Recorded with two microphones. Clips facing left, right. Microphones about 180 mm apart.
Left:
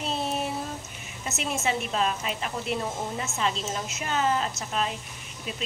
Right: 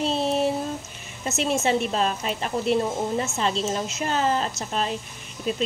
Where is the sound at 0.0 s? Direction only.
30° right (ahead or behind).